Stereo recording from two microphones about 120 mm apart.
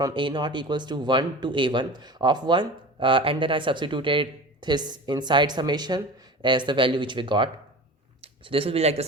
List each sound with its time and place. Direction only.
0.0 s speech: 40° right (ahead or behind); by 9.0 s 60° right (ahead or behind)